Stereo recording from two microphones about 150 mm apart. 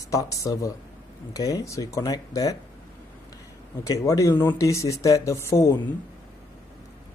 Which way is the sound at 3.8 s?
20° left (ahead or behind).